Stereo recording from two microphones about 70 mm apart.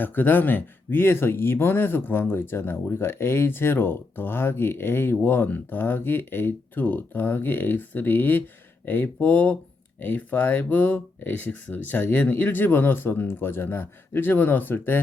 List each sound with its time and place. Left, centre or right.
0.0 s speech: left